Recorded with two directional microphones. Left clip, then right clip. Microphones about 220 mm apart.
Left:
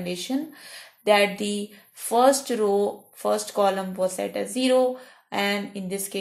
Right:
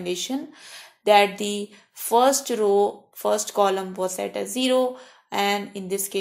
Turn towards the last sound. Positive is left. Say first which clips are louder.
# right 3 dB
turn(degrees=-25)  # may be behind; listen again after turning